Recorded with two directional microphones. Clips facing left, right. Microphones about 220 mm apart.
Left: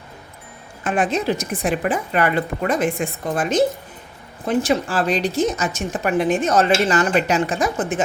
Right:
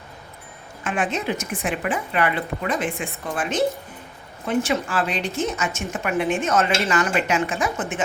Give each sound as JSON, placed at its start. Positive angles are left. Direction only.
{"t": 0.9, "sound": "a woman's voice", "side_deg": 35}